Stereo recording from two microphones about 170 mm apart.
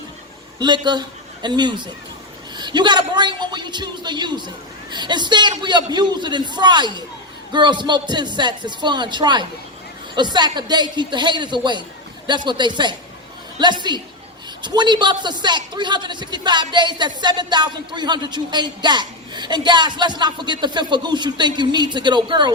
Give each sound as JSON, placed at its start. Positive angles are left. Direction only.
{"t": 0.6, "sound": "a man's voice", "side_deg": -25}